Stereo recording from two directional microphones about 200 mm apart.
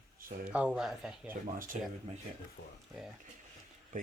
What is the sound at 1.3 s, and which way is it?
Speech, 40° right (ahead or behind).